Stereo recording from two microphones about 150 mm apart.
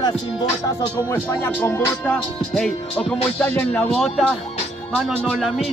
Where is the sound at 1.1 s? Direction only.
20° left (ahead or behind).